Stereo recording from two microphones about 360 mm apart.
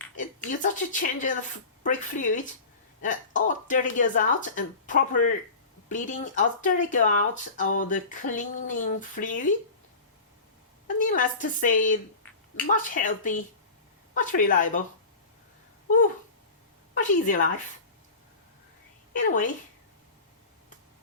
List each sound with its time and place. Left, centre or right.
0.2 s a woman's voice: left
10.8 s speech: left
16.9 s speech: left
19.1 s speech: left